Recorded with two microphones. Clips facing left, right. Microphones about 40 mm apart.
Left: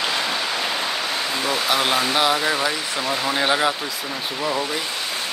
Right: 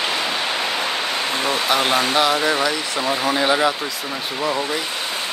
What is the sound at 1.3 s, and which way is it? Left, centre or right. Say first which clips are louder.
Speech: right 2 dB; right.